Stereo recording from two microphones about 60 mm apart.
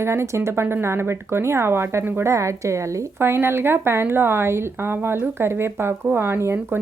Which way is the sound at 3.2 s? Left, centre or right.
Right.